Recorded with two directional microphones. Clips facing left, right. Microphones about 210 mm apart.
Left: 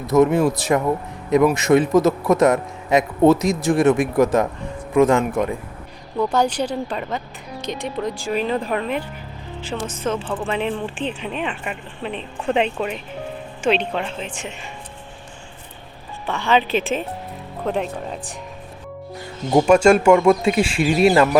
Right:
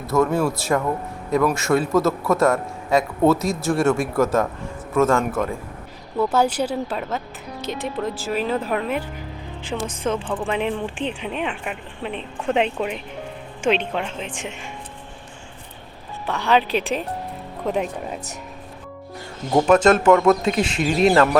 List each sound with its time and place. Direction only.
0.1 s a man's voice: 20° left (ahead or behind)
6.1 s speech: 5° right (ahead or behind)
16.2 s speech: centre (ahead or behind)
19.5 s a man's voice: 10° left (ahead or behind)